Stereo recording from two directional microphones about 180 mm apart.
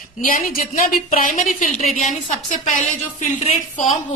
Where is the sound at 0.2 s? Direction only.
50° left (ahead or behind).